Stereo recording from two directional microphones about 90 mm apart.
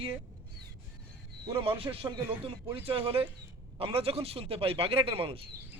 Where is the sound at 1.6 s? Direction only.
90° right.